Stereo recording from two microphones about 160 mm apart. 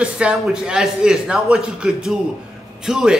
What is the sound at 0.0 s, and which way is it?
A man's voice, 5° right (ahead or behind).